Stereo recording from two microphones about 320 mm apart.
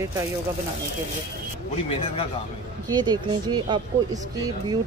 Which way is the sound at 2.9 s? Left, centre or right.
Centre.